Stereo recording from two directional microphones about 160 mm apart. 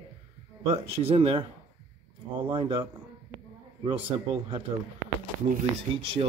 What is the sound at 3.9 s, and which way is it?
Speech, 35° right (ahead or behind).